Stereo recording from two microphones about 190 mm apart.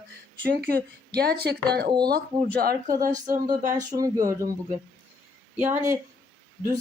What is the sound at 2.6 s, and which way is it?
Speech, 50° right (ahead or behind).